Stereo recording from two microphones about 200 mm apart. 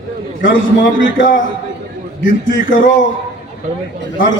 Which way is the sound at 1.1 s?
40° left (ahead or behind).